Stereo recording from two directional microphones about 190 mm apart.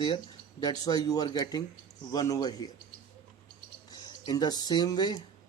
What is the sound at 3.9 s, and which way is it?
Speech, 20° left (ahead or behind).